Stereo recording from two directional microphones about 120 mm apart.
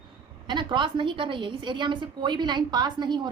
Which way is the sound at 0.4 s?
40° right (ahead or behind).